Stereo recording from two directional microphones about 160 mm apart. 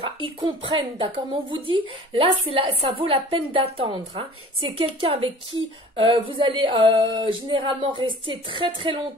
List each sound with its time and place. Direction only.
0.2 s speech: 30° right (ahead or behind)